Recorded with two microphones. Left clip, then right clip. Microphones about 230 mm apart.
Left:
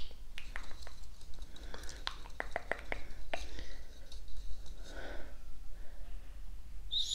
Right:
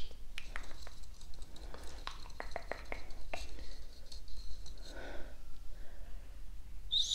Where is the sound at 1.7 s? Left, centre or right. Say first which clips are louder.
Left 4 dB; centre.